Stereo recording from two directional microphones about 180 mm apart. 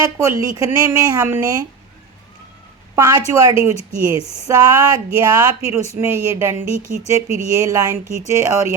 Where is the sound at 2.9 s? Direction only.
15° right (ahead or behind).